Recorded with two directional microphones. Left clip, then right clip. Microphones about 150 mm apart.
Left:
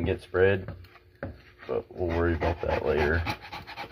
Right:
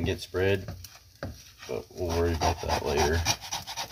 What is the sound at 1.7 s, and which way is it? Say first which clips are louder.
Speech: left 1 dB; 5° right (ahead or behind).